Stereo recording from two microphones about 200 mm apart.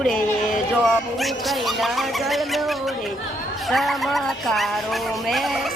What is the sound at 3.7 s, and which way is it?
Speech, centre (ahead or behind).